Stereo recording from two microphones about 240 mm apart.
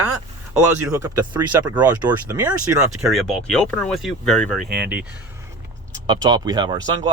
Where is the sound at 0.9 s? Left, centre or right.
Centre.